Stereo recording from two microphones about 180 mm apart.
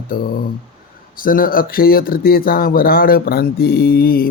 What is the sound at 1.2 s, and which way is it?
Speech, 50° left (ahead or behind).